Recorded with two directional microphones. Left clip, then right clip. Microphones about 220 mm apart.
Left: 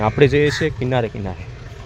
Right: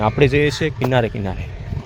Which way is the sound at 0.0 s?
5° left (ahead or behind).